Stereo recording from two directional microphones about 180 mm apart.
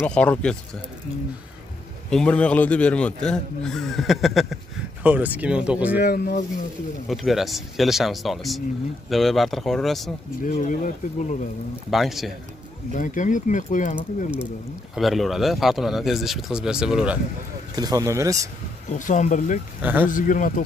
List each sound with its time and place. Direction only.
0.0 s speech: 5° left (ahead or behind)
2.0 s speech: 5° left (ahead or behind)
5.9 s speech: 60° left (ahead or behind)
7.1 s speech: centre (ahead or behind)
10.4 s speech: 45° left (ahead or behind)
11.9 s speech: centre (ahead or behind)
12.9 s speech: 45° left (ahead or behind)
15.0 s speech: centre (ahead or behind)
17.7 s speech: 20° right (ahead or behind)
18.9 s speech: 45° left (ahead or behind)
19.8 s speech: 10° right (ahead or behind)
20.1 s speech: 45° left (ahead or behind)